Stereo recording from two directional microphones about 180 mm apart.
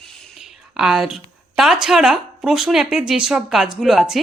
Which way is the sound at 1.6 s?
Centre (ahead or behind).